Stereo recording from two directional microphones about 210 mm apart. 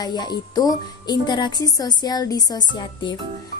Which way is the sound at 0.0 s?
20° left (ahead or behind).